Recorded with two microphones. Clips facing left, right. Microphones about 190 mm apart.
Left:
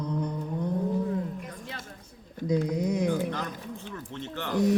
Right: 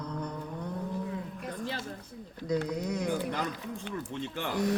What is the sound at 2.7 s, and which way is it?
Mantra, 10° left (ahead or behind).